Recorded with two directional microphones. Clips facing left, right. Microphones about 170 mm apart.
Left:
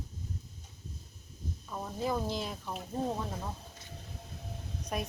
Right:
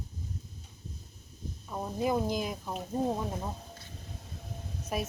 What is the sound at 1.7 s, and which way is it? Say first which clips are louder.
Speech: right 4 dB; 15° right (ahead or behind).